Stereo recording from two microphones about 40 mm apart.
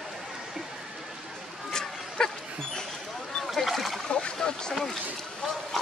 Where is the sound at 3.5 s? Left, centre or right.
Centre.